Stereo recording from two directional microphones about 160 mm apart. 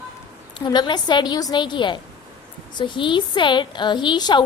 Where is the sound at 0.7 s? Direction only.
25° left (ahead or behind).